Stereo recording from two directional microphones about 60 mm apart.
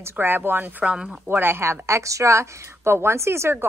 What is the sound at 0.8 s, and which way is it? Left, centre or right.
Speech, centre.